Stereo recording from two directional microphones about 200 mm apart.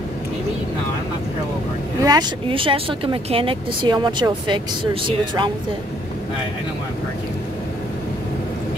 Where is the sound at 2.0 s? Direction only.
25° right (ahead or behind).